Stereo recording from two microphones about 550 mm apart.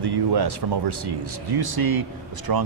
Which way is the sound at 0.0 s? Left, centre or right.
Right.